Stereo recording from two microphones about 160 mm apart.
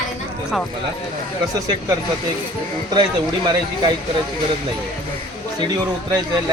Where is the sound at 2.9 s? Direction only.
25° right (ahead or behind).